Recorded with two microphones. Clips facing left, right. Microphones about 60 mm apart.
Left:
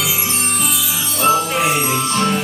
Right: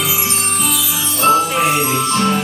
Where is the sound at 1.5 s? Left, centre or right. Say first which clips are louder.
Right 2 dB; centre.